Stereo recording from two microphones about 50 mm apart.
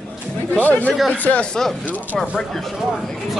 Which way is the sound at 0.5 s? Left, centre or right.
Left.